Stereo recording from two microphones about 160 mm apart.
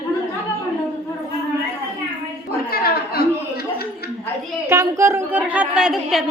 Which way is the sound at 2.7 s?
70° left (ahead or behind).